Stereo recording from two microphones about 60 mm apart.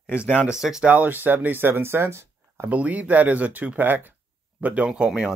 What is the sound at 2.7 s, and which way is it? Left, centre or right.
Speech, right.